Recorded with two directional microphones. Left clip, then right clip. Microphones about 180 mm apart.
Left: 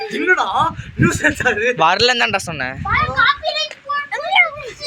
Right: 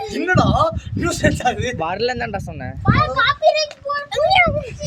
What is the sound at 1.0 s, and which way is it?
Speech, 65° right (ahead or behind).